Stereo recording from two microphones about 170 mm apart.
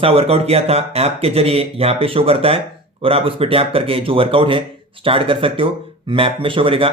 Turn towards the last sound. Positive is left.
turn(degrees=-30)  # may be behind; listen again after turning